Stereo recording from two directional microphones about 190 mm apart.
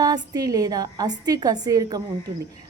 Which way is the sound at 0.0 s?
20° right (ahead or behind).